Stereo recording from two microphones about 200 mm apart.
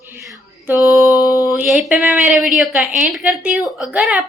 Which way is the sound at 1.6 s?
Centre (ahead or behind).